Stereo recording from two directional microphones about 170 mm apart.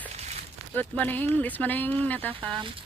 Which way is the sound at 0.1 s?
40° right (ahead or behind).